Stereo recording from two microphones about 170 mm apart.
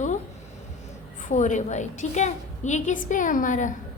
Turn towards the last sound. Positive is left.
turn(degrees=50)  # may be behind; listen again after turning